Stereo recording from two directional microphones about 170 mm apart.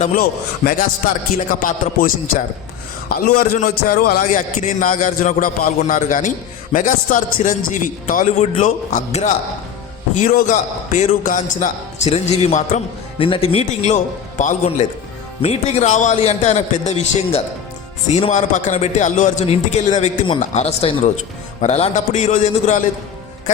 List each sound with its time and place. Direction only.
0.0 s a man's voice: 55° left (ahead or behind)
13.1 s a man's voice: 30° left (ahead or behind)
20.0 s a man's voice: 30° left (ahead or behind)
20.4 s a man's voice: 40° left (ahead or behind)